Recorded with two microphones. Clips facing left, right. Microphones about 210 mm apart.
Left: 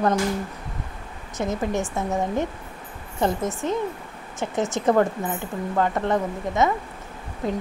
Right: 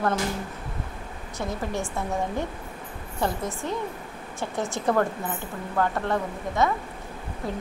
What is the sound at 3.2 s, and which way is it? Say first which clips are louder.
Speech: left 4 dB; 20° left (ahead or behind).